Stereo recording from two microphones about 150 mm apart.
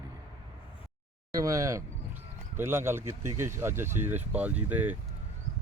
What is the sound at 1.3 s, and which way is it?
A man's voice, 20° right (ahead or behind).